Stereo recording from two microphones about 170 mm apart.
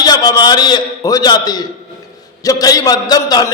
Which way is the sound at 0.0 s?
25° left (ahead or behind).